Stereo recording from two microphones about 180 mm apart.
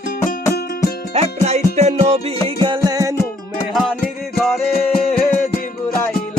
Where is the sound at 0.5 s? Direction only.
65° left (ahead or behind).